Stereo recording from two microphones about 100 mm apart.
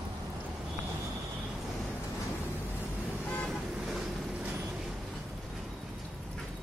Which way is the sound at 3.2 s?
10° left (ahead or behind).